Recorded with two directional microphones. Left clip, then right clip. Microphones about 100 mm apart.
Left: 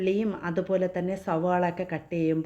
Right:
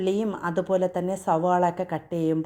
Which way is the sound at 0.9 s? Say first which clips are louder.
Right 4 dB; 40° right (ahead or behind).